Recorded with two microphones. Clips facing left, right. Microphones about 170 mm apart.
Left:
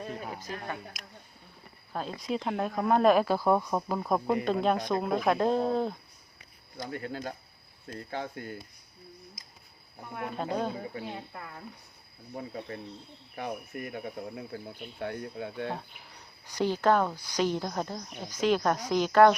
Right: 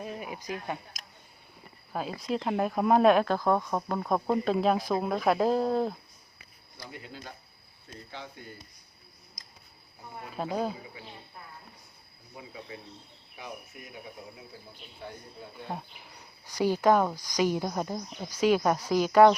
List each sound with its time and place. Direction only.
0.4 s speech: 15° right (ahead or behind)
1.9 s speech: 5° right (ahead or behind)
6.8 s speech: 50° left (ahead or behind)
10.3 s speech: 5° right (ahead or behind)
10.9 s speech: 60° left (ahead or behind); by 11.6 s 80° left
12.4 s speech: 50° left (ahead or behind); by 15.7 s 70° left (ahead or behind)
16.5 s speech: 10° right (ahead or behind)